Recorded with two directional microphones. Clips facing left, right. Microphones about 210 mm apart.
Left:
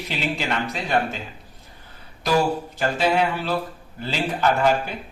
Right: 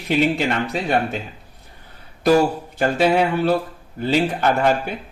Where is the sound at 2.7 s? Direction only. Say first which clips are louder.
Right 5 dB; 55° right (ahead or behind).